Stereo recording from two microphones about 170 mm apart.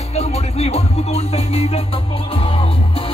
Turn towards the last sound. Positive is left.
turn(degrees=35)  # may be behind; listen again after turning